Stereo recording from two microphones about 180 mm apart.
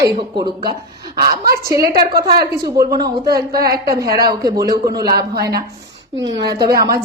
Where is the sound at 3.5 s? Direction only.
60° right (ahead or behind).